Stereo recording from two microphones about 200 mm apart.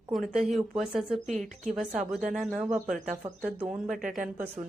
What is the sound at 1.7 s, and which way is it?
A woman's voice, 5° right (ahead or behind).